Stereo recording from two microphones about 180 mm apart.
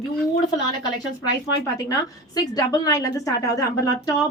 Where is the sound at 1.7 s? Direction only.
20° left (ahead or behind).